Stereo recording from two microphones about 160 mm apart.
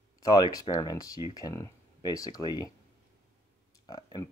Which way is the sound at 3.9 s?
25° left (ahead or behind).